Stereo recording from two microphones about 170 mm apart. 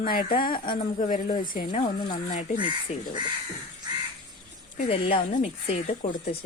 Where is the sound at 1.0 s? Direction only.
50° left (ahead or behind).